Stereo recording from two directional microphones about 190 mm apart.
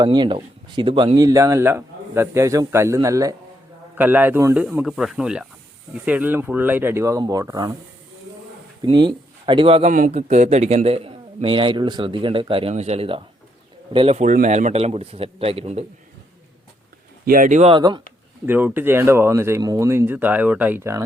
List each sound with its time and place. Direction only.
0.0 s speech: 25° right (ahead or behind)
8.8 s speech: 25° right (ahead or behind)
9.9 s a man's voice: 40° right (ahead or behind)
17.2 s a man's voice: 45° right (ahead or behind); by 18.0 s 25° right (ahead or behind)
18.4 s speech: 10° right (ahead or behind)